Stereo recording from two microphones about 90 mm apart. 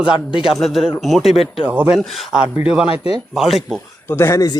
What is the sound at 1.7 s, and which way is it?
Speech, 15° right (ahead or behind).